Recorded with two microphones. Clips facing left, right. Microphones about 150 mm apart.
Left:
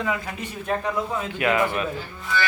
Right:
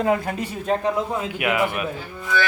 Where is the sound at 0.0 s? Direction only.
45° right (ahead or behind).